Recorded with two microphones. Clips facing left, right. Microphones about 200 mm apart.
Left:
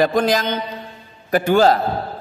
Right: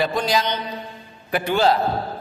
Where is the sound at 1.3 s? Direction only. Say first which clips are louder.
Left 5 dB; 45° left (ahead or behind).